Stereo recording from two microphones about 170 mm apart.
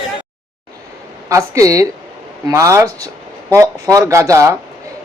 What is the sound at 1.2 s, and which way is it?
A woman's voice, 20° right (ahead or behind).